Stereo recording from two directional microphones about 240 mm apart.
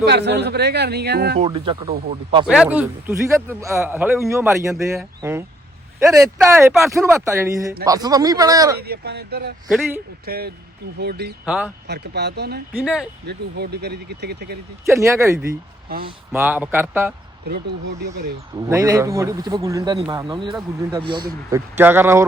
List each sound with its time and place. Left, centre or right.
0.0 s speech: right
1.4 s speech: right
2.5 s a man's voice: centre
8.8 s speech: right
9.6 s a man's voice: centre
10.2 s speech: right
11.4 s a man's voice: centre
11.9 s speech: right
12.7 s a man's voice: centre
13.2 s speech: right
14.8 s a man's voice: centre
18.5 s a man's voice: centre